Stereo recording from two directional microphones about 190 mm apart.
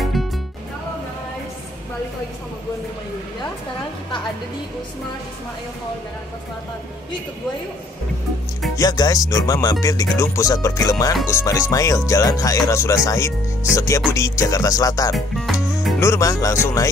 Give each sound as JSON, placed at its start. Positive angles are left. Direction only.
{"t": 0.0, "sound": "music", "side_deg": 0}
{"t": 8.7, "sound": "music", "side_deg": 20}
{"t": 15.1, "sound": "music", "side_deg": 0}
{"t": 16.0, "sound": "music", "side_deg": 15}